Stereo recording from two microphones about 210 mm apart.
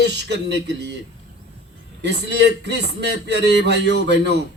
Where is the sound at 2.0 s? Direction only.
55° right (ahead or behind).